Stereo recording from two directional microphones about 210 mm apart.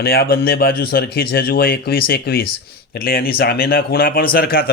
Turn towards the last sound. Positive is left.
turn(degrees=45)  # may be behind; listen again after turning